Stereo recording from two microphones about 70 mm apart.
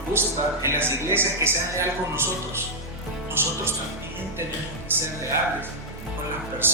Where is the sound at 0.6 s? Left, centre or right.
Right.